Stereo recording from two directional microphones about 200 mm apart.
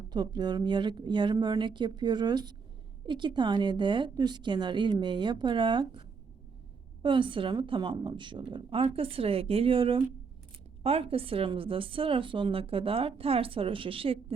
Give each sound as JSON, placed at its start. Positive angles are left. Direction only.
{"t": 0.1, "sound": "speech", "side_deg": -20}